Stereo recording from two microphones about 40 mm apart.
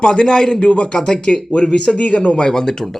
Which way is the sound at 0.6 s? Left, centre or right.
Left.